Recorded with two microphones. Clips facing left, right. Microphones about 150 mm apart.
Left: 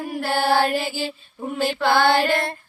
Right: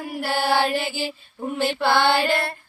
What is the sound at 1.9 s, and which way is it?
Music, 20° left (ahead or behind).